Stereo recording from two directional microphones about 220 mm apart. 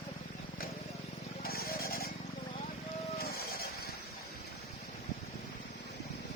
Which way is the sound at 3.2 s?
45° left (ahead or behind).